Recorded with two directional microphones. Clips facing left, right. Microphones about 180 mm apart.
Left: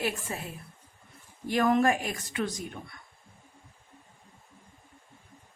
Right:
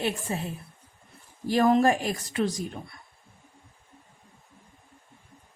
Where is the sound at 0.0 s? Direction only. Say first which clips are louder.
Right 3 dB; 30° right (ahead or behind).